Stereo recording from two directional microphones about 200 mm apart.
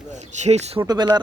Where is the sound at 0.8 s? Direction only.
20° right (ahead or behind).